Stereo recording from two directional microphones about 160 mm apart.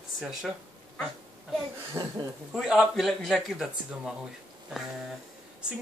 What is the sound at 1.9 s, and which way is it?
Speech, 20° right (ahead or behind).